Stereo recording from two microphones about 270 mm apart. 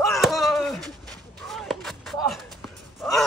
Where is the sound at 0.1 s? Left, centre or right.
Centre.